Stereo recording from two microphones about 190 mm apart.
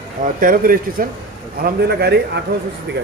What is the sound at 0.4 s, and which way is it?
A man's voice, 50° right (ahead or behind).